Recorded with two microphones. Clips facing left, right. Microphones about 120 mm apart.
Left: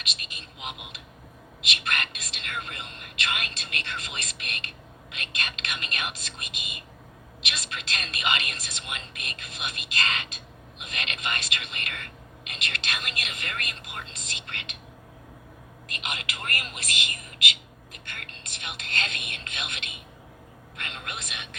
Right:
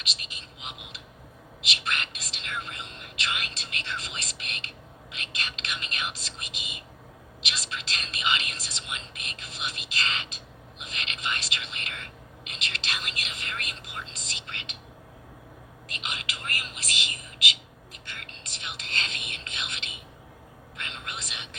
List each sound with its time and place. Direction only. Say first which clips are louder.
0.0 s a sound: left 1 dB; 55° left (ahead or behind)
5.1 s whispering: left 3 dB; 55° left (ahead or behind)
15.9 s whispering: left 2 dB; 55° left (ahead or behind)